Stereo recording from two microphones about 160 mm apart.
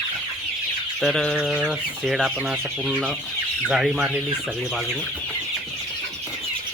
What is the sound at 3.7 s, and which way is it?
Speech, 5° right (ahead or behind).